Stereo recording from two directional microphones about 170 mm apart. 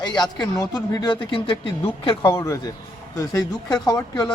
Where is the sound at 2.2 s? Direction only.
15° left (ahead or behind).